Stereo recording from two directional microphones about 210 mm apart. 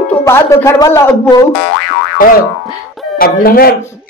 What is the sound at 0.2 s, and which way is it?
Speech, 15° left (ahead or behind).